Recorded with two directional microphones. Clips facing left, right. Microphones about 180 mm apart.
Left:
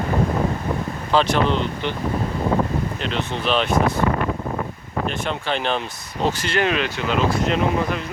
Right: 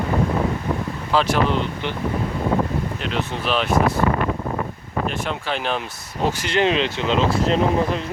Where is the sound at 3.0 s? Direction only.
5° right (ahead or behind).